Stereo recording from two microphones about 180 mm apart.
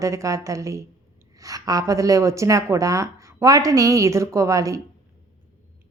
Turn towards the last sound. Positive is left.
turn(degrees=-20)  # may be behind; listen again after turning